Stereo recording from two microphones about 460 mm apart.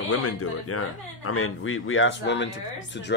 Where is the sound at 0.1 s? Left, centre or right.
Left.